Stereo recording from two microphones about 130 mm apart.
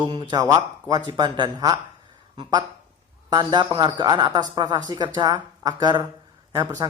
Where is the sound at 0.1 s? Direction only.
35° right (ahead or behind).